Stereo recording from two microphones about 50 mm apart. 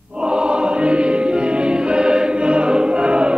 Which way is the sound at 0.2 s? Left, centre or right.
Centre.